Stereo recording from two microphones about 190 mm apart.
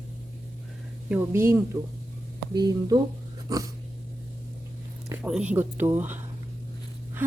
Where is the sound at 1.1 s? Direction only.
10° right (ahead or behind).